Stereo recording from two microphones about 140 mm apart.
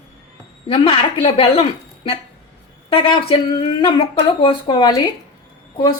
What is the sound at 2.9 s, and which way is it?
A woman's voice, 40° left (ahead or behind).